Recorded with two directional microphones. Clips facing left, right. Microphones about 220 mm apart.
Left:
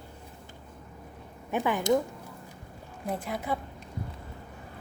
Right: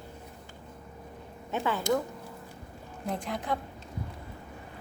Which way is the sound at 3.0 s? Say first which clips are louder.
Left 1 dB; 5° left (ahead or behind).